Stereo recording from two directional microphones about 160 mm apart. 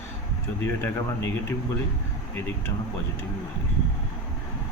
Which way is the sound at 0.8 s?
15° left (ahead or behind).